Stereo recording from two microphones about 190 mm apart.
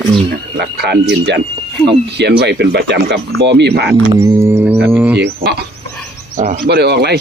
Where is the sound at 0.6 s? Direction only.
60° right (ahead or behind).